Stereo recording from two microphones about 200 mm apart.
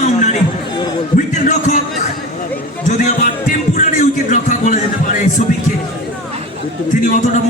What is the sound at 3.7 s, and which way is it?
Music, 40° left (ahead or behind).